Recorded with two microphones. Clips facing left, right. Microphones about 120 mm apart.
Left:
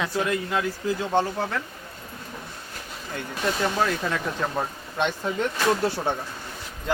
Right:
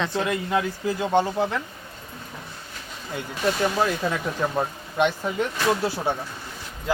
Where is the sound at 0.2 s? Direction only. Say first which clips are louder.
Right 1 dB; 20° right (ahead or behind).